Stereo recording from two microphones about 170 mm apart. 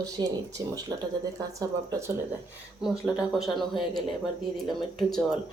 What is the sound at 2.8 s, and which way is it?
Speech, 5° right (ahead or behind).